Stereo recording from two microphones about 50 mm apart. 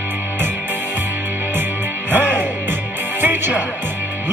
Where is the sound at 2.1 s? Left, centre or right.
Right.